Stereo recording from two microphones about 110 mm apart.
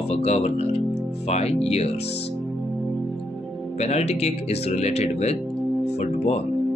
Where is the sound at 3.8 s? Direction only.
85° left.